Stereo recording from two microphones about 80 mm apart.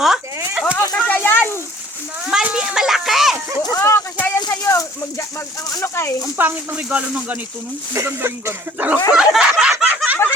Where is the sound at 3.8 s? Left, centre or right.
Left.